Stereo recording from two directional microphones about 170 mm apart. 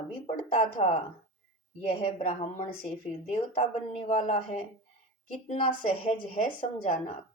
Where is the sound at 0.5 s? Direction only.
30° left (ahead or behind).